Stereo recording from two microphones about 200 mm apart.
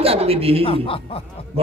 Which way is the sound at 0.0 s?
30° right (ahead or behind).